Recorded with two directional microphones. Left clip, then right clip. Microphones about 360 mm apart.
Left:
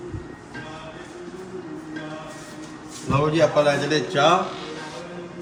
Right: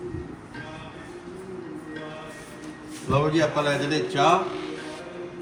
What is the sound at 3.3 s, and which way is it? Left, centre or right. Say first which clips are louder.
Speech: left 5 dB; centre.